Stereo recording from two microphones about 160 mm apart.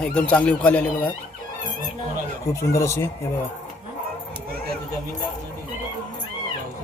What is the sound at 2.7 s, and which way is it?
Speech, 15° left (ahead or behind).